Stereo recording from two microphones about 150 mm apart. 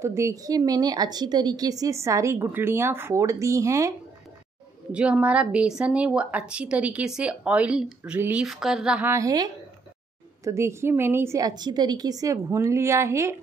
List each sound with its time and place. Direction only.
0.0 s a woman's voice: 20° right (ahead or behind)
4.9 s speech: 10° right (ahead or behind)
9.1 s a woman's voice: 25° right (ahead or behind)